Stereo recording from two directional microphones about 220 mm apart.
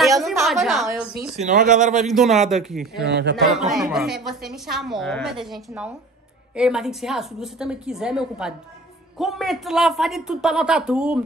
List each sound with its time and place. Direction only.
0.2 s a woman's voice: centre (ahead or behind)
1.3 s speech: 35° right (ahead or behind)
2.0 s a woman's voice: centre (ahead or behind)
3.1 s a man's voice: 50° right (ahead or behind)
3.5 s a woman's voice: centre (ahead or behind)